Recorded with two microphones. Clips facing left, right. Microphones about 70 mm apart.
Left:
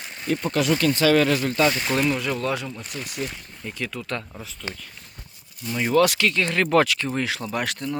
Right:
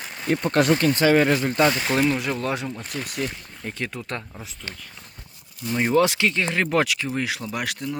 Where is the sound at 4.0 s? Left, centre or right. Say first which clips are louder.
Left 1 dB; right.